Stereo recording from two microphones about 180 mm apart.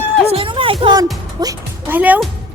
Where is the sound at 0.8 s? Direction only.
25° right (ahead or behind).